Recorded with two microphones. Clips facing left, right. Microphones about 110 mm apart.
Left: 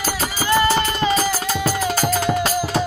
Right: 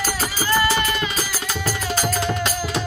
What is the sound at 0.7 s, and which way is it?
Music, 35° left (ahead or behind).